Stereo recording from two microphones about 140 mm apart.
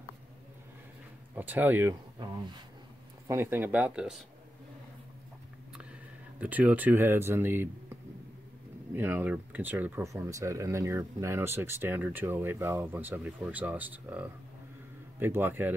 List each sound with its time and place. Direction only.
1.3 s speech: 15° right (ahead or behind)
3.3 s speech: 15° right (ahead or behind)
6.4 s speech: 10° right (ahead or behind)